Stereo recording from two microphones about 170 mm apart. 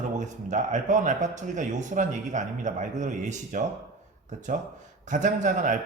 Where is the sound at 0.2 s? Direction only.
45° right (ahead or behind).